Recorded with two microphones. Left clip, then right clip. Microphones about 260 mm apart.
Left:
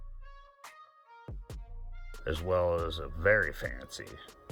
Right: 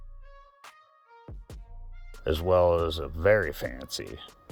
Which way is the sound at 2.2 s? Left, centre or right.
Right.